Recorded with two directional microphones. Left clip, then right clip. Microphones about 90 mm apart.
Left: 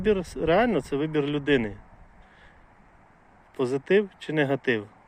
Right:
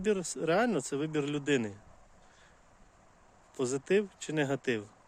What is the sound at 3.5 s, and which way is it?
Speech, 25° right (ahead or behind).